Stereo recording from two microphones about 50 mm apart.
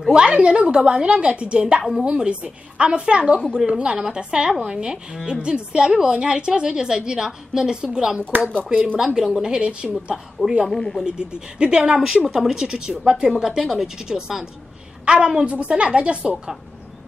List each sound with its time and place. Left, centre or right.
0.1 s a woman's voice: right
8.4 s speech: left
8.7 s a woman's voice: right
9.0 s speech: centre
10.7 s speech: centre
11.1 s a woman's voice: centre